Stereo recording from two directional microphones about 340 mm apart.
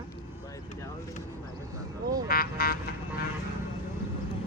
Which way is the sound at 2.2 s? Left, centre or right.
Left.